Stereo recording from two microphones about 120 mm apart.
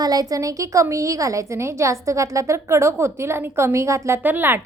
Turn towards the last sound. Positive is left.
turn(degrees=-15)  # may be behind; listen again after turning